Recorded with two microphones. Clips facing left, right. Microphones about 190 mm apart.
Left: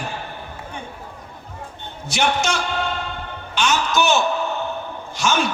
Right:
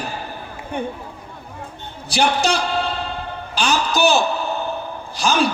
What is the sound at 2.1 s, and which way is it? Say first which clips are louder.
A man's voice: right 3 dB; 35° right (ahead or behind).